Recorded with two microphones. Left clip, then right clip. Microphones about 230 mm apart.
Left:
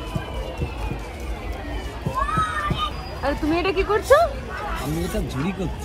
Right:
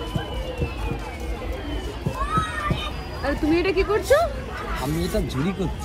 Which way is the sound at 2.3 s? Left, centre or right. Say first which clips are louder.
Right 1 dB; centre.